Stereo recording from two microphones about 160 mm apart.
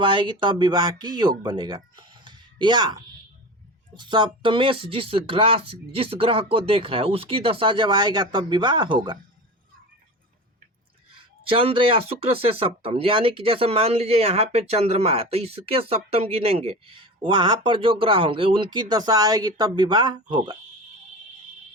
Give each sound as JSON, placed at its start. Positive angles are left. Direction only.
{"t": 0.0, "sound": "speech", "side_deg": -30}
{"t": 11.4, "sound": "speech", "side_deg": -35}